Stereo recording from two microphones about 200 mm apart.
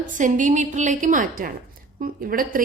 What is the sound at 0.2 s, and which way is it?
A woman's voice, 40° right (ahead or behind).